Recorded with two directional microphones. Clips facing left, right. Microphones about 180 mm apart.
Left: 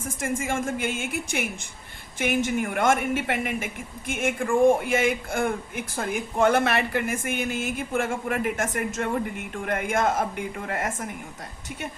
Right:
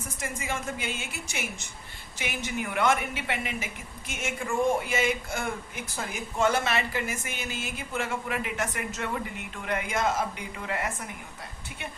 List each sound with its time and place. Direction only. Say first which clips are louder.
0.0 s speech: left 7 dB; 50° left (ahead or behind)